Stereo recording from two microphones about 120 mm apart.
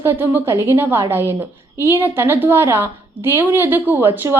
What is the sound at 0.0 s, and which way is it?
A woman's voice, 15° right (ahead or behind).